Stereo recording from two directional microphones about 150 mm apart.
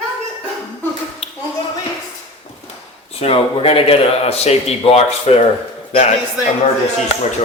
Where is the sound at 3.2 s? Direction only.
40° left (ahead or behind).